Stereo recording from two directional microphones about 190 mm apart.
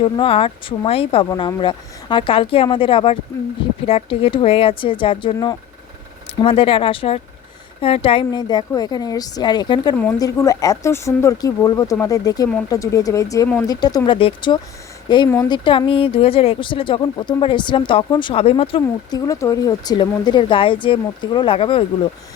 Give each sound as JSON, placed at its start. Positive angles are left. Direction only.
{"t": 0.0, "sound": "speech", "side_deg": 30}